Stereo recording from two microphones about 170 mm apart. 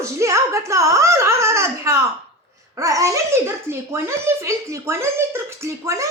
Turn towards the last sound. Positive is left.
turn(degrees=-20)  # may be behind; listen again after turning